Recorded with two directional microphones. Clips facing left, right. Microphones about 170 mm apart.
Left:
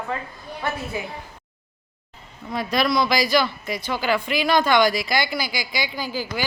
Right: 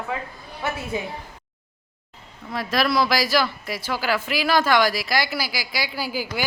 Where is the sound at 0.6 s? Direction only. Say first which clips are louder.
Even; 5° right (ahead or behind).